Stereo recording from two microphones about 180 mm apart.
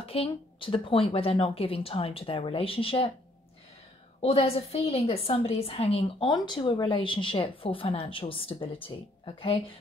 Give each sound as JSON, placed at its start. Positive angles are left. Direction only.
{"t": 0.0, "sound": "a woman's voice", "side_deg": 30}
{"t": 4.2, "sound": "a woman's voice", "side_deg": 35}